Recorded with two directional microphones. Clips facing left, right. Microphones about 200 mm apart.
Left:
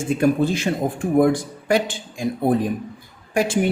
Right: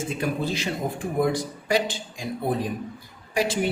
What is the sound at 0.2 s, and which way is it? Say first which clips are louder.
Speech: left 10 dB; 50° left (ahead or behind).